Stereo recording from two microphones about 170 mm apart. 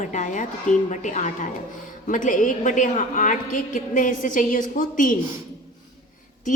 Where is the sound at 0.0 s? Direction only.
45° left (ahead or behind).